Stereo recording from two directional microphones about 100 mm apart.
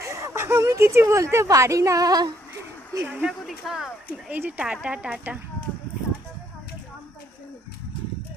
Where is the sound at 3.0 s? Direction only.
15° right (ahead or behind).